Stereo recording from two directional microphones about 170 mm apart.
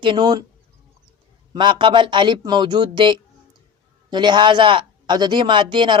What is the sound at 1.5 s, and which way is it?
Speech, 30° right (ahead or behind).